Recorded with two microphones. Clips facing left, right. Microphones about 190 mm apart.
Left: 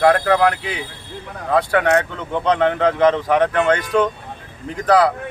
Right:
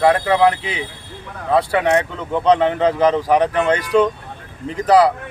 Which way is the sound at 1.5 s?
5° right (ahead or behind).